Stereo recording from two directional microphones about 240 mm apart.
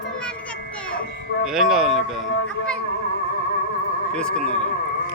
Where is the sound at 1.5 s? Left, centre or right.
Centre.